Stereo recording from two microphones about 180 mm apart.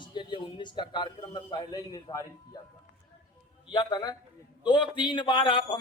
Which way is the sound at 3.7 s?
25° left (ahead or behind).